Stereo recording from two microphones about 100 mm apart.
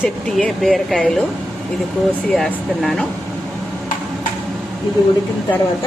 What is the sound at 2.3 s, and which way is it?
Speech, 5° left (ahead or behind).